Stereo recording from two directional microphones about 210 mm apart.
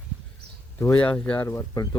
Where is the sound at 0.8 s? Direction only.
10° left (ahead or behind).